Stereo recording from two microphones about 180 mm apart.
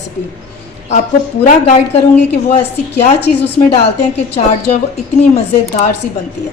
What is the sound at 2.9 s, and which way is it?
Speech, 65° left (ahead or behind).